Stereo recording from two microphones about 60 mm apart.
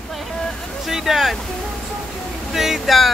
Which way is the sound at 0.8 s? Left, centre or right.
Centre.